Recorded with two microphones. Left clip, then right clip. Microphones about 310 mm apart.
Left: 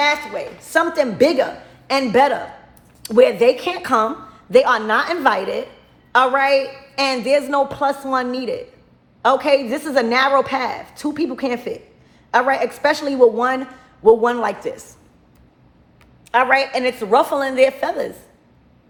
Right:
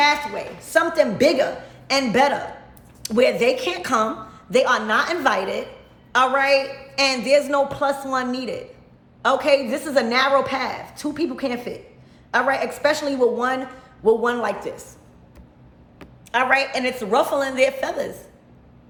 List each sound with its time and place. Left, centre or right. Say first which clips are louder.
0.0 s a man's voice: even; centre
16.3 s a man's voice: left 4 dB; centre